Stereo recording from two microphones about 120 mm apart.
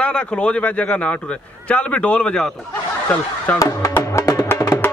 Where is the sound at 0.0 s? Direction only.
10° left (ahead or behind).